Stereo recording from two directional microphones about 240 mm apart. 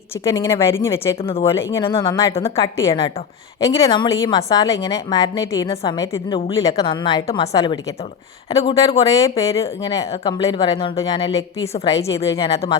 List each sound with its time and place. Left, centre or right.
0.3 s a woman's voice: centre
1.2 s a woman's voice: left
1.5 s a woman's voice: centre